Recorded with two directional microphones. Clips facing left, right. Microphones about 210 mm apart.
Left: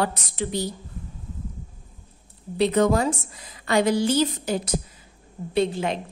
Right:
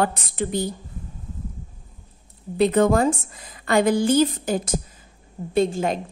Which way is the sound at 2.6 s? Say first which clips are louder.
Right 2 dB; 50° right (ahead or behind).